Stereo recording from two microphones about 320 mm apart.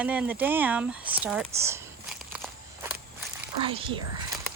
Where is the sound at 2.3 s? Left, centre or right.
Centre.